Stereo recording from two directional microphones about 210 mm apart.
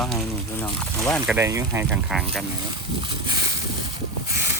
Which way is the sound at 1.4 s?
15° right (ahead or behind).